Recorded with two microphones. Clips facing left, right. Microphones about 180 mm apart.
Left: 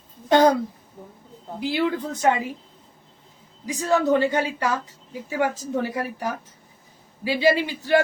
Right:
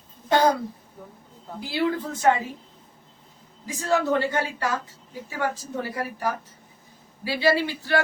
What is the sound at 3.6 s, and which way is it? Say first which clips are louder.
A man's voice: left 3 dB; 15° left (ahead or behind).